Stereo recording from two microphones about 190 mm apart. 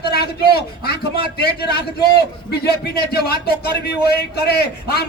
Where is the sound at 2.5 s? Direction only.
55° left (ahead or behind).